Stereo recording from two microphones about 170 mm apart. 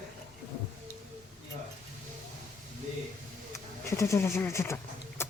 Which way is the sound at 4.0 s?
15° left (ahead or behind).